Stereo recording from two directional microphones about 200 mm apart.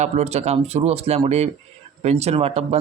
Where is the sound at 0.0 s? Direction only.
35° right (ahead or behind).